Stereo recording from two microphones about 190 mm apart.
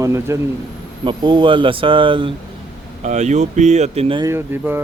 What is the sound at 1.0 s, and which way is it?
Speech, 25° right (ahead or behind).